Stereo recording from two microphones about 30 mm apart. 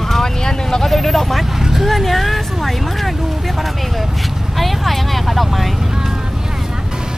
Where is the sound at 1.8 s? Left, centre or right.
Centre.